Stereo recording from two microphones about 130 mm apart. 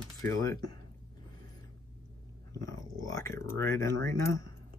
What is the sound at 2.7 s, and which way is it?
Speech, 25° left (ahead or behind).